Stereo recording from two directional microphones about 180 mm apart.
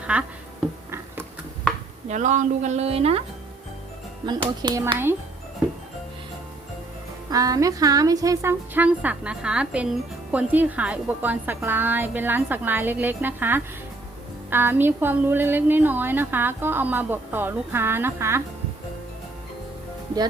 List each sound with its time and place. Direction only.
0.1 s speech: 5° right (ahead or behind)
2.0 s a woman's voice: 40° right (ahead or behind)
4.6 s speech: 20° right (ahead or behind)
7.3 s speech: 20° right (ahead or behind)